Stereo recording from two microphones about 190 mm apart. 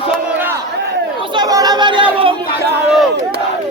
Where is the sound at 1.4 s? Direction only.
20° right (ahead or behind).